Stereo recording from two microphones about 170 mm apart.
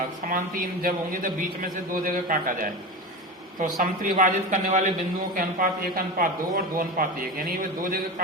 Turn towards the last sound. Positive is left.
turn(degrees=-55)  # may be behind; listen again after turning